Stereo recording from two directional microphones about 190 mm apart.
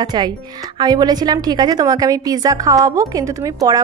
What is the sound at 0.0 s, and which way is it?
A woman's voice, 25° right (ahead or behind).